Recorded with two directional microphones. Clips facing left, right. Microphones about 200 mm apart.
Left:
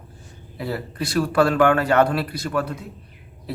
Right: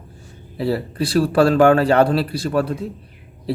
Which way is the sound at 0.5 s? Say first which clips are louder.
Right 7 dB; 30° right (ahead or behind).